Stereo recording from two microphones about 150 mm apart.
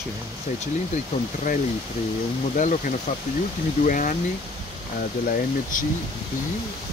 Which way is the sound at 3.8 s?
60° left (ahead or behind).